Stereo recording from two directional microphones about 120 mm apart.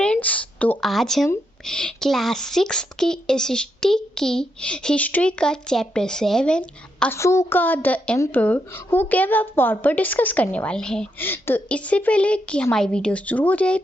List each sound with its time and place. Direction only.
0.0 s a sound: 10° left (ahead or behind)
0.9 s a woman's voice: centre (ahead or behind)
7.1 s a woman's voice: 25° left (ahead or behind); by 11.1 s 5° left (ahead or behind)
11.2 s a woman's voice: 15° left (ahead or behind)